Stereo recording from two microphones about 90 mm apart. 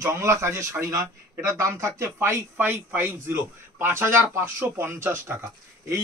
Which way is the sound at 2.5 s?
25° right (ahead or behind).